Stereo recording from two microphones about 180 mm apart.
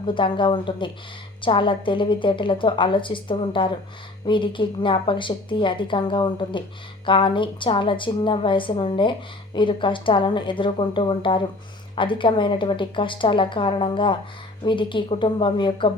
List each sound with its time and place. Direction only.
0.0 s a woman's voice: 25° left (ahead or behind)